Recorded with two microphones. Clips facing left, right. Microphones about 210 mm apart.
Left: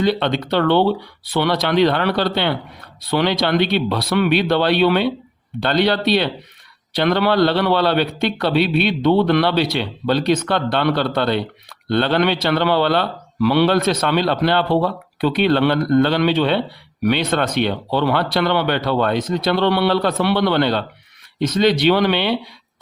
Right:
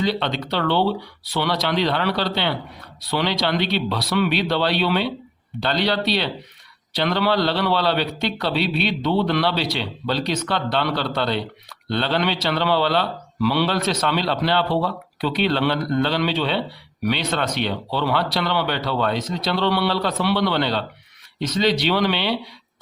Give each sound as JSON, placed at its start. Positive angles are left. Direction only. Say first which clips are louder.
{"t": 0.0, "sound": "a man's voice", "louder": "left 5 dB", "side_deg": 55}